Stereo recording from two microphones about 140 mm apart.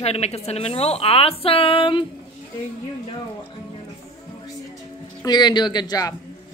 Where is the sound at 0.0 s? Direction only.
50° left (ahead or behind).